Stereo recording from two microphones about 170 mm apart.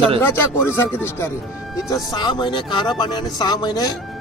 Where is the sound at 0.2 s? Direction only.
10° left (ahead or behind).